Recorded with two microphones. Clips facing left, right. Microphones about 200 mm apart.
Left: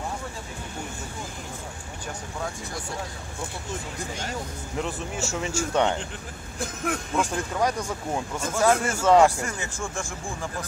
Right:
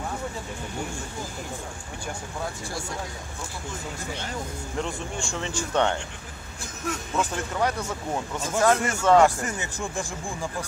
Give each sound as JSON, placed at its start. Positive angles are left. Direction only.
{"t": 4.7, "sound": "speech", "side_deg": 5}
{"t": 7.2, "sound": "speech", "side_deg": 10}
{"t": 9.8, "sound": "speech", "side_deg": -15}